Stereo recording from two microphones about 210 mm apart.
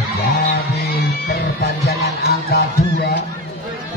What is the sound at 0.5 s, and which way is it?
Music, 45° left (ahead or behind).